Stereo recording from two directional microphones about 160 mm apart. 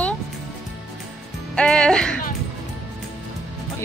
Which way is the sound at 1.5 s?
5° left (ahead or behind).